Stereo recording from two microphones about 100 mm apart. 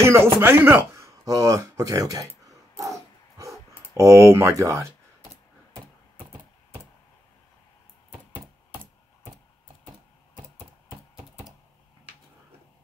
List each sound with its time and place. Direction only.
0.0 s a sound: 25° right (ahead or behind)
0.4 s speech: 25° right (ahead or behind)
3.9 s speech: 30° right (ahead or behind)